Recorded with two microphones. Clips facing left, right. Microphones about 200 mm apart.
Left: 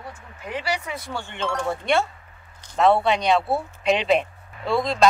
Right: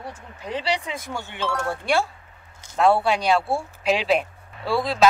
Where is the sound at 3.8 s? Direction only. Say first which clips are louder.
Left 1 dB; centre (ahead or behind).